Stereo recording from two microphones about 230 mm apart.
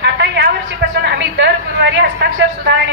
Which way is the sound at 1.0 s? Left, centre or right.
Right.